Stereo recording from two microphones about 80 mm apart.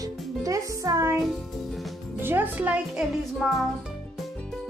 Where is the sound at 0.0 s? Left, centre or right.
Right.